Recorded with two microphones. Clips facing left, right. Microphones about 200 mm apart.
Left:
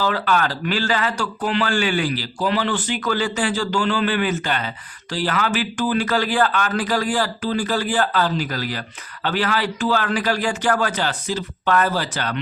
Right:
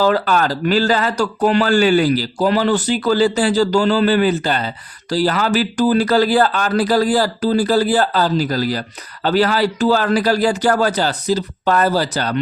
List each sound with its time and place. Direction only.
0.0 s a man's voice: 40° right (ahead or behind)